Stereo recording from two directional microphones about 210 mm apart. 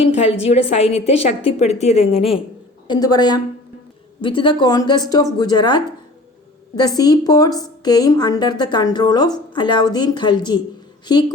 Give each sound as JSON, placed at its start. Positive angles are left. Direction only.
{"t": 0.4, "sound": "a woman's voice", "side_deg": 30}
{"t": 2.8, "sound": "a woman's voice", "side_deg": 20}